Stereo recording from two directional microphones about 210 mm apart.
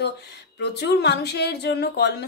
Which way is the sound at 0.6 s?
50° left (ahead or behind).